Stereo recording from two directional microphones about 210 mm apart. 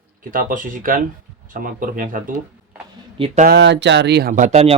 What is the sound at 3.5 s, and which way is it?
Speech, 55° right (ahead or behind).